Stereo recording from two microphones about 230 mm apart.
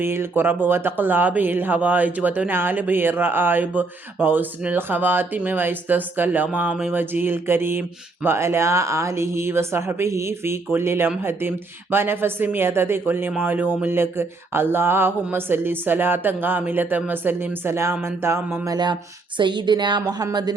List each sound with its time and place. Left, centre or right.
0.0 s a woman's voice: centre